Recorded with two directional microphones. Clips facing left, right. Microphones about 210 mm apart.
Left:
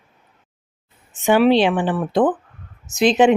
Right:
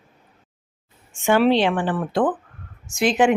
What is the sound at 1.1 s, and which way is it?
A woman's voice, 15° left (ahead or behind).